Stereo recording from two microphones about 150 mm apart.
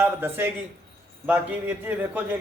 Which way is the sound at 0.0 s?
15° right (ahead or behind).